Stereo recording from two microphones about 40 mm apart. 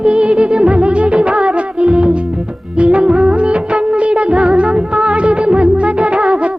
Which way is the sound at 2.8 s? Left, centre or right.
Right.